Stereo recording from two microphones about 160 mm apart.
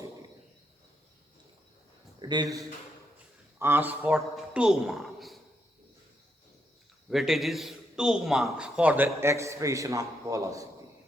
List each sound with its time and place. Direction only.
2.1 s a man's voice: 25° right (ahead or behind)
3.6 s a woman's voice: 10° right (ahead or behind)
7.1 s a man's voice: centre (ahead or behind); by 10.7 s 20° right (ahead or behind)